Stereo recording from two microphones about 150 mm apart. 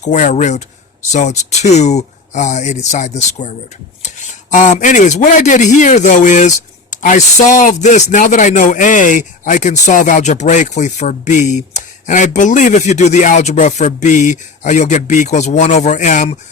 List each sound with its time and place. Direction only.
0.0 s speech: 55° left (ahead or behind)
4.5 s speech: 55° left (ahead or behind)